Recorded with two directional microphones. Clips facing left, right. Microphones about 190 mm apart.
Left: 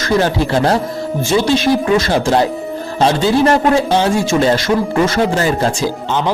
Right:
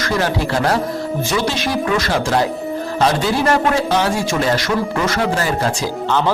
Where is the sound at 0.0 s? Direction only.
25° left (ahead or behind).